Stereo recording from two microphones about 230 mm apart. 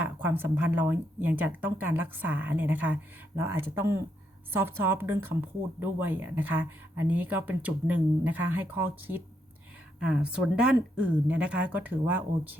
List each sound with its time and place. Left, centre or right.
0.0 s speech: centre